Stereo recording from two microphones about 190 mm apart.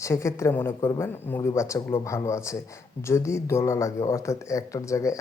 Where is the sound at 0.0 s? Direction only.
15° left (ahead or behind).